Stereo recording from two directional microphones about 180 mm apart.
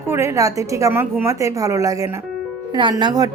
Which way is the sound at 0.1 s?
15° right (ahead or behind).